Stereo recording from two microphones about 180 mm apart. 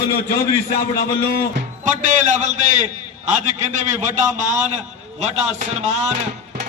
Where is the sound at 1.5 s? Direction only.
45° right (ahead or behind).